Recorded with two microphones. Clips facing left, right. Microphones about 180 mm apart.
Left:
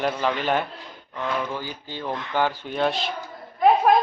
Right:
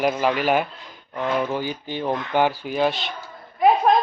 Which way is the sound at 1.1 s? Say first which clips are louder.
Right 4 dB; 25° right (ahead or behind).